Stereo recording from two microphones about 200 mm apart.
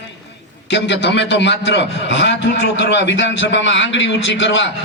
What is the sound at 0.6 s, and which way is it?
A man's voice, 60° left (ahead or behind).